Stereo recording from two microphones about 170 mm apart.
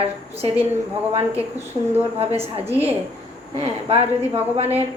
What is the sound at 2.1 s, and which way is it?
A woman's voice, 35° right (ahead or behind).